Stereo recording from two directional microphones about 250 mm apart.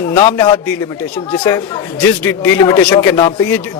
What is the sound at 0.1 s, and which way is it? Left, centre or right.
A man's voice, centre.